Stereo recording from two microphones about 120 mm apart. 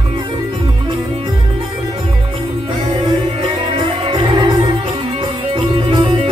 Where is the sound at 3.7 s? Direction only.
45° right (ahead or behind).